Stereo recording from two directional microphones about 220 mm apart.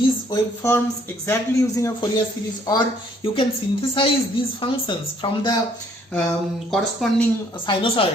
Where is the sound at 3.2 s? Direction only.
25° left (ahead or behind).